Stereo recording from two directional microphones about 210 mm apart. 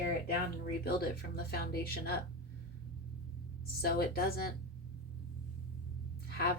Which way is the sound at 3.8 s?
45° left (ahead or behind).